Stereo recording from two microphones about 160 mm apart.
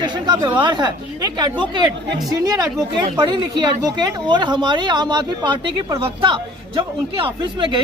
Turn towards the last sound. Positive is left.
turn(degrees=-30)  # may be behind; listen again after turning